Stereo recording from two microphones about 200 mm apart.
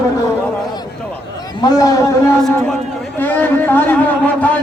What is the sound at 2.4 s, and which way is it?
A man's voice, 5° left (ahead or behind).